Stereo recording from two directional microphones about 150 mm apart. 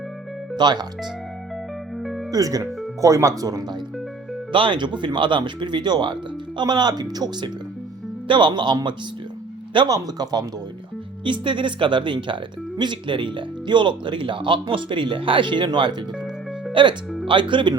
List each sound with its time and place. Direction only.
0.5 s speech: 30° right (ahead or behind)
2.0 s music: centre (ahead or behind)
2.3 s speech: 25° right (ahead or behind)